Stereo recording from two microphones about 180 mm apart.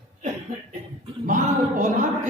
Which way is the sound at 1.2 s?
45° right (ahead or behind).